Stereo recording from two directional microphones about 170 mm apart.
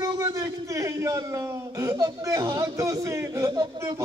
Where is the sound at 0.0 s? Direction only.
20° right (ahead or behind).